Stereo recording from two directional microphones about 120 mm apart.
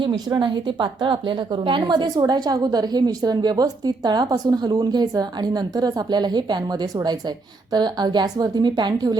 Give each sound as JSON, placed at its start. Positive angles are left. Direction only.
{"t": 0.3, "sound": "a woman's voice", "side_deg": -40}